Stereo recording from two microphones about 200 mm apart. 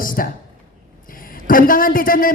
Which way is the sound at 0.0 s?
45° left (ahead or behind).